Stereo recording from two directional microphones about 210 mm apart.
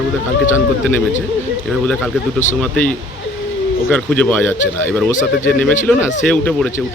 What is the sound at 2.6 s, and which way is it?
Speech, 5° left (ahead or behind).